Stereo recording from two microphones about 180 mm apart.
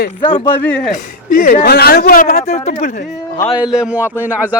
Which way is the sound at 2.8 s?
55° left (ahead or behind).